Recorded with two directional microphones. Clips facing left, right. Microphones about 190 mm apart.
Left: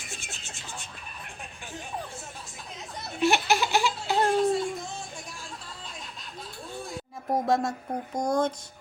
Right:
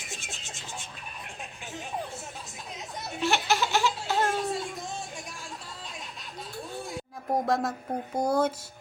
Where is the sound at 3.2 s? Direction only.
15° left (ahead or behind).